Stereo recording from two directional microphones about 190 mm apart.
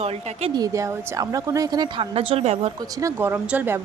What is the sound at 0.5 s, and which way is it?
Speech, 20° right (ahead or behind).